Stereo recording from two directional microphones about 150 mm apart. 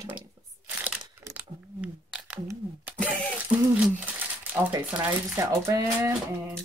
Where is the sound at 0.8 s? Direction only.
10° right (ahead or behind).